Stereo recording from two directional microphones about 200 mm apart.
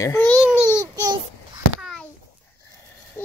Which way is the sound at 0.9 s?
20° right (ahead or behind).